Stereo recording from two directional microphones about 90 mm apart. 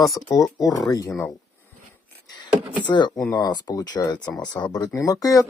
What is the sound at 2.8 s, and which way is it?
Speech, 55° left (ahead or behind).